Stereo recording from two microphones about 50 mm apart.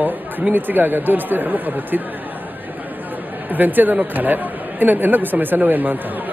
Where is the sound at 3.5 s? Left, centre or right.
Right.